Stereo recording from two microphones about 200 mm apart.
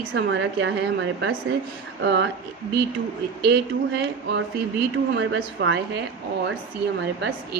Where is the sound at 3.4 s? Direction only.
60° right (ahead or behind).